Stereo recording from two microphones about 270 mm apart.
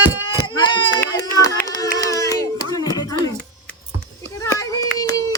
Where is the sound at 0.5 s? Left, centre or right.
Centre.